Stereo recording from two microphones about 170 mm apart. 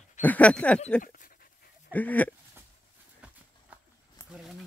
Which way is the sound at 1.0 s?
50° left (ahead or behind).